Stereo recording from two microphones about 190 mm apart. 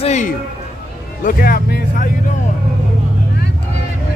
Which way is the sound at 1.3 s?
50° left (ahead or behind).